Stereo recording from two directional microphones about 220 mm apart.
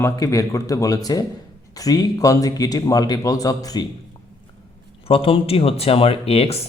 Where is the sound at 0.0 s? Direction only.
15° left (ahead or behind).